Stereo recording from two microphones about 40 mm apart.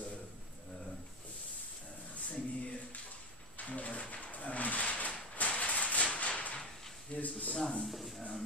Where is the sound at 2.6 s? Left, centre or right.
Left.